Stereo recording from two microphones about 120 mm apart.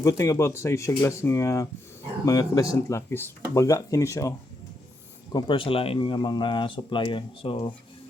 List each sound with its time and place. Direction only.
0.0 s speech: 25° left (ahead or behind)
5.3 s speech: 40° left (ahead or behind)